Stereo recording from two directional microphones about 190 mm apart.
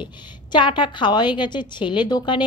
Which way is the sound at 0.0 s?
25° left (ahead or behind).